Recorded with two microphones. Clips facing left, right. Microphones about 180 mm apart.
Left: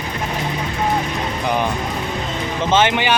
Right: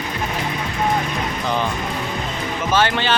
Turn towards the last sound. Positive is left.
turn(degrees=15)  # may be behind; listen again after turning